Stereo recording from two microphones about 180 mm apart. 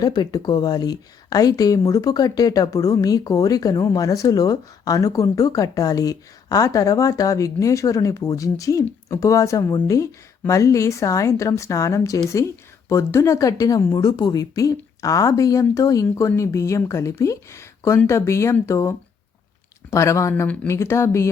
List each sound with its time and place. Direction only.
0.0 s a woman's voice: 20° left (ahead or behind)